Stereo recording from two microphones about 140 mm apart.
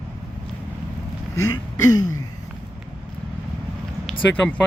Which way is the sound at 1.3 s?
25° left (ahead or behind).